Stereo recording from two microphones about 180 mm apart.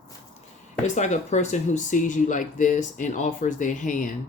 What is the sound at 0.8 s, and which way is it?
Speech, 40° left (ahead or behind).